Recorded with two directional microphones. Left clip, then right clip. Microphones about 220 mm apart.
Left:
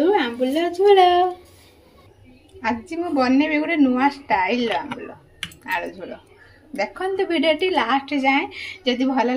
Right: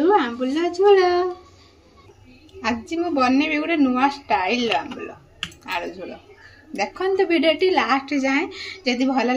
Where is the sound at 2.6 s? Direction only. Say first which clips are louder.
Even; 5° right (ahead or behind).